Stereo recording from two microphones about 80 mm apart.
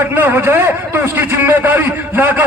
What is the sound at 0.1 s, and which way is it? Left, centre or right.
A man's voice, right.